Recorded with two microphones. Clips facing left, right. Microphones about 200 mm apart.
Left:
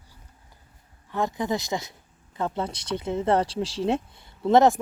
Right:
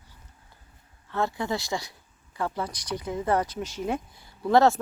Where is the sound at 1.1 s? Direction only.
15° left (ahead or behind).